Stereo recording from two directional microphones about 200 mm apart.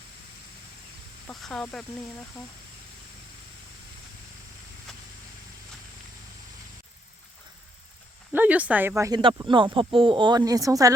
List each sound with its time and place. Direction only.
1.3 s speech: centre (ahead or behind)
8.3 s speech: 10° right (ahead or behind)